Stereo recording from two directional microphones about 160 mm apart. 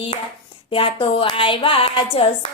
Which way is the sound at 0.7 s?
35° left (ahead or behind).